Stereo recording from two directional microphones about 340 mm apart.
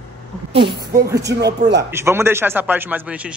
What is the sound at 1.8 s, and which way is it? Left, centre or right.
Speech, centre.